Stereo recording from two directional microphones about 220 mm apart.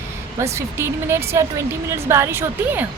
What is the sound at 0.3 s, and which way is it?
A woman's voice, 10° right (ahead or behind).